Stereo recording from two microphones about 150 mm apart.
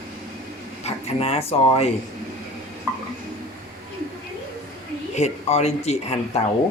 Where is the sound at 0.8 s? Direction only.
40° left (ahead or behind).